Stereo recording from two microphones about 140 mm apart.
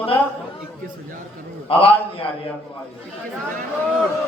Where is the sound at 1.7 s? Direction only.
40° left (ahead or behind).